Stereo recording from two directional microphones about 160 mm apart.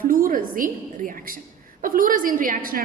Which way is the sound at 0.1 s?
60° right (ahead or behind).